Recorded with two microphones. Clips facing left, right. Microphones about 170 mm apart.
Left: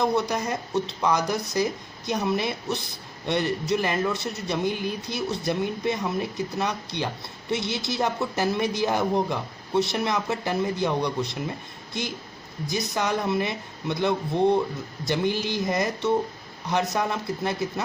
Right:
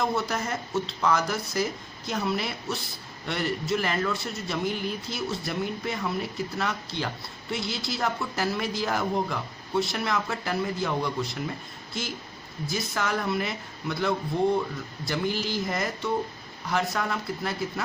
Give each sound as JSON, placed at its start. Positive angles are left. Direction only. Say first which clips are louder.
{"t": 0.0, "sound": "speech", "louder": "left 4 dB", "side_deg": 15}
{"t": 12.6, "sound": "speech", "louder": "left 3 dB", "side_deg": 20}